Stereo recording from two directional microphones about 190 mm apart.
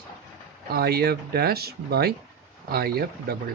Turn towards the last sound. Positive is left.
turn(degrees=-55)  # may be behind; listen again after turning